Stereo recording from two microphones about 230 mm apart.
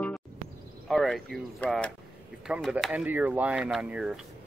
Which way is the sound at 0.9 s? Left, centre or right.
Centre.